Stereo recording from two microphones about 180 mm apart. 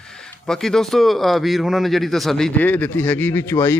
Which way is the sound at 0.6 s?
Centre (ahead or behind).